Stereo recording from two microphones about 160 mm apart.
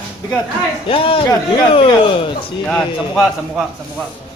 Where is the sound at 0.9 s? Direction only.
35° left (ahead or behind).